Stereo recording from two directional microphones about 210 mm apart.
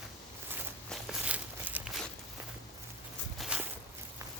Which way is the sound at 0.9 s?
5° right (ahead or behind).